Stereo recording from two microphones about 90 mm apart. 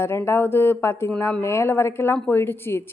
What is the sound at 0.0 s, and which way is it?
Speech, 30° left (ahead or behind).